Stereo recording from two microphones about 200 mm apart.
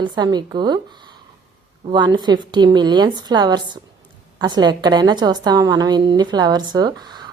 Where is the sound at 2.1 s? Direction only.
20° right (ahead or behind).